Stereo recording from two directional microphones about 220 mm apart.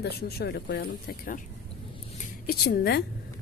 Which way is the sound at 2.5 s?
45° left (ahead or behind).